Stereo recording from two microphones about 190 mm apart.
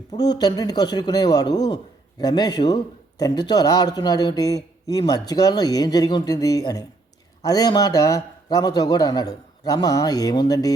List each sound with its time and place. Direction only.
0.2 s a man's voice: 20° left (ahead or behind)